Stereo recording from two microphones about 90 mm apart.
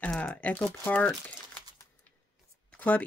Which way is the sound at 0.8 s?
20° left (ahead or behind).